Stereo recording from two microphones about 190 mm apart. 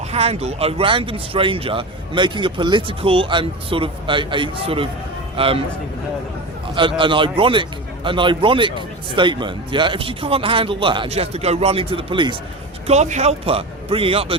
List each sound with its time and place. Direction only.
0.1 s speech: 35° right (ahead or behind)
6.7 s speech: 25° right (ahead or behind)
12.9 s a man's voice: 35° right (ahead or behind)